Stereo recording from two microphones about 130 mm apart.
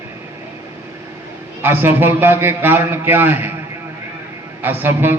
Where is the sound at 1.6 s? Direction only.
15° right (ahead or behind).